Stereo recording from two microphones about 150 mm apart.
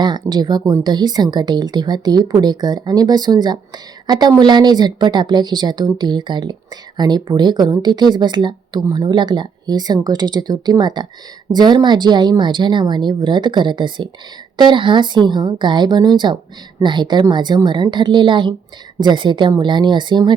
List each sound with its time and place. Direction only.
0.0 s speech: 30° right (ahead or behind)